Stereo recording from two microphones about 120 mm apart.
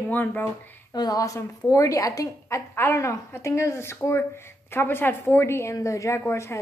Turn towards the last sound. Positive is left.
turn(degrees=25)  # may be behind; listen again after turning